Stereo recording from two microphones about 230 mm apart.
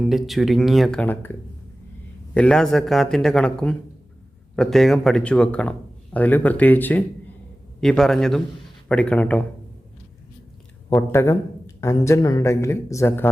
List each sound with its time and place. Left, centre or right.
0.0 s a man's voice: centre
2.3 s a man's voice: centre
10.8 s a man's voice: centre